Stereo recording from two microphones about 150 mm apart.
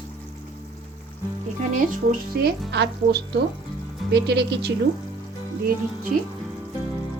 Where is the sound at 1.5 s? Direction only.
65° right (ahead or behind); by 4.7 s 90° right.